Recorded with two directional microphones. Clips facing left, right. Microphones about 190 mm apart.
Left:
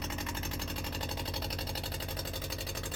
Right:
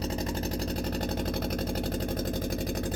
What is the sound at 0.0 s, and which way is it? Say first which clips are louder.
Engine: right 9 dB; 35° right (ahead or behind).